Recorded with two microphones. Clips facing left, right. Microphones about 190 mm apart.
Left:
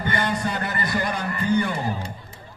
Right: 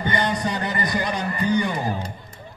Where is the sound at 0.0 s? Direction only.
20° right (ahead or behind).